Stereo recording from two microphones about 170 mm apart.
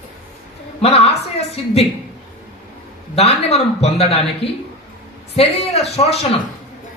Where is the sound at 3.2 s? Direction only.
40° left (ahead or behind).